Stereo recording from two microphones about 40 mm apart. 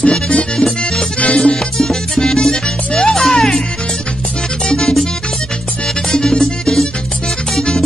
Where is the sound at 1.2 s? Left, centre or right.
Left.